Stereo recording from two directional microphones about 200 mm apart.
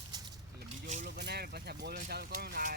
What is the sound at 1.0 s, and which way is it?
Speech, 60° right (ahead or behind).